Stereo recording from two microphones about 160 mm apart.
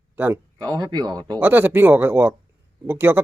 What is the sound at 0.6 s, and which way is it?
Speech, 25° right (ahead or behind).